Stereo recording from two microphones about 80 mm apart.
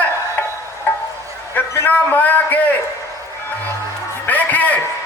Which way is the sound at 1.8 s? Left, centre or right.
Left.